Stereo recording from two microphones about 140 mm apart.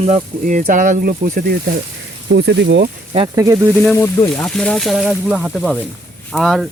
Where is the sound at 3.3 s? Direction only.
25° right (ahead or behind).